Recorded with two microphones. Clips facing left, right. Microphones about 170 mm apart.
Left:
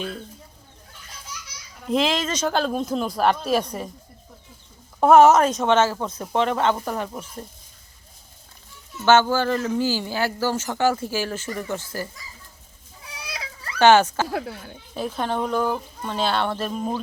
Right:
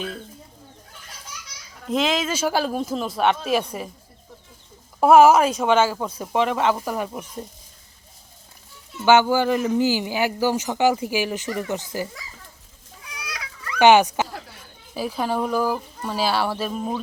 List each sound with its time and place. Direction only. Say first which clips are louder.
1.9 s speech: even; centre (ahead or behind)
4.9 s speech: even; 10° right (ahead or behind)
9.0 s speech: right 1 dB; 15° right (ahead or behind)
13.1 s a sound: left 1 dB; 30° left (ahead or behind)
13.7 s speech: right 1 dB; 15° right (ahead or behind)
14.3 s speech: left 10 dB; 65° left (ahead or behind)
14.9 s speech: right 1 dB; 5° right (ahead or behind)